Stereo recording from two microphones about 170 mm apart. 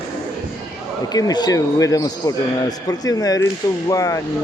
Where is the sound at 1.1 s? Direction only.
20° left (ahead or behind).